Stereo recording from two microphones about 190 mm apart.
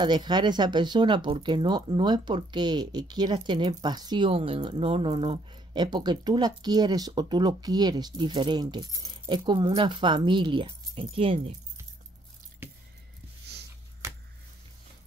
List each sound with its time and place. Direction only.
0.0 s speech: 25° right (ahead or behind)